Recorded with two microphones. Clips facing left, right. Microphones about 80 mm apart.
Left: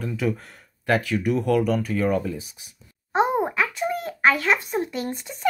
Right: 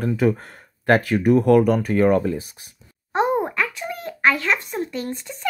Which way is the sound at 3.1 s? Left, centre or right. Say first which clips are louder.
Right 1 dB; centre.